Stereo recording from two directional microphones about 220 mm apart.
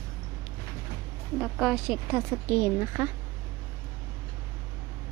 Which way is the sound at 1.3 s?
Centre (ahead or behind).